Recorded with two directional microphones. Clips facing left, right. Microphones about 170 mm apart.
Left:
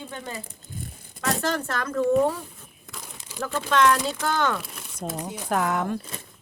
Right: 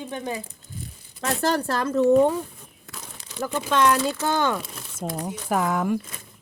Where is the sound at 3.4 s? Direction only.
15° right (ahead or behind).